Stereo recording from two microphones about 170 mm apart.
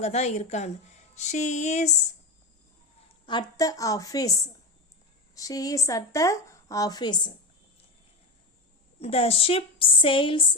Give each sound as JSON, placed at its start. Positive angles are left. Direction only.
{"t": 0.0, "sound": "a woman's voice", "side_deg": 40}
{"t": 1.1, "sound": "music", "side_deg": 45}
{"t": 3.2, "sound": "a woman's voice", "side_deg": 25}
{"t": 9.0, "sound": "a woman's voice", "side_deg": 35}